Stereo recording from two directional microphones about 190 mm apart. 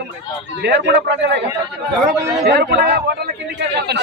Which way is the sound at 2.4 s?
55° right (ahead or behind).